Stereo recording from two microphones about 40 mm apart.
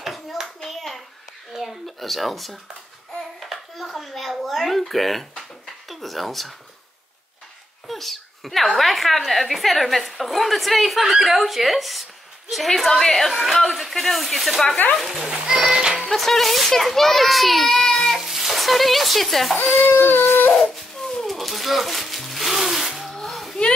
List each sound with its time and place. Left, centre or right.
0.0 s hands: centre
1.6 s a child's voice: centre
7.9 s a child's voice: centre
15.2 s speech: centre
16.1 s a woman's voice: centre
19.6 s speech: centre
20.0 s a sound: left
21.3 s a sound: centre